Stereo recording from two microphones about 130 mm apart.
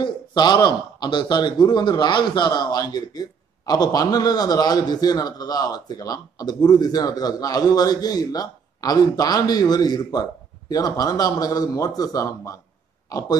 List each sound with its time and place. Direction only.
0.0 s a man's voice: 35° left (ahead or behind)